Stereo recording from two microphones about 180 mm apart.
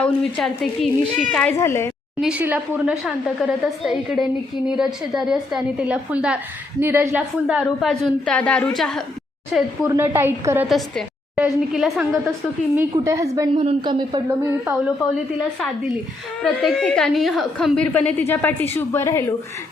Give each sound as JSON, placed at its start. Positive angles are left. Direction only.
{"t": 0.0, "sound": "a woman's voice", "side_deg": 5}
{"t": 1.5, "sound": "a woman's voice", "side_deg": 15}
{"t": 2.2, "sound": "a woman's voice", "side_deg": -5}
{"t": 9.8, "sound": "a woman's voice", "side_deg": -15}
{"t": 10.7, "sound": "a woman's voice", "side_deg": 0}
{"t": 12.7, "sound": "a woman's voice", "side_deg": -15}
{"t": 13.5, "sound": "speech", "side_deg": -30}
{"t": 16.4, "sound": "a woman's voice", "side_deg": 0}